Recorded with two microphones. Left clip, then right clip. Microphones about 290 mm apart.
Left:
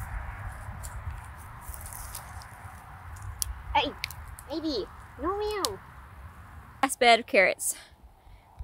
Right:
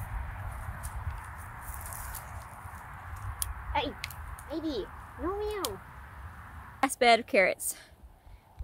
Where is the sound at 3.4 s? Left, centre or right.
Centre.